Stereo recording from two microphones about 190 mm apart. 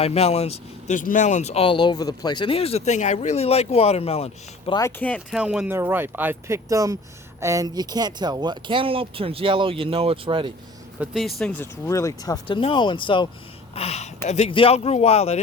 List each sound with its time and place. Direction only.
0.0 s speech: 35° left (ahead or behind)
4.8 s speech: 10° left (ahead or behind)
5.3 s speech: 5° right (ahead or behind); by 10.5 s 25° right (ahead or behind)
11.0 s speech: centre (ahead or behind); by 15.4 s 35° left (ahead or behind)